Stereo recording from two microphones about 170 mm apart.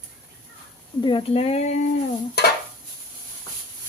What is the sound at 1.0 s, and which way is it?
Speech, 30° left (ahead or behind).